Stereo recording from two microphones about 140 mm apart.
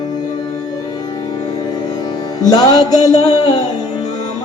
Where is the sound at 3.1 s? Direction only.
50° left (ahead or behind).